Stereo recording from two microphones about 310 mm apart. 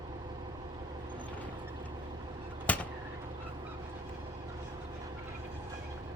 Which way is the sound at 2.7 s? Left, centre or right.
Centre.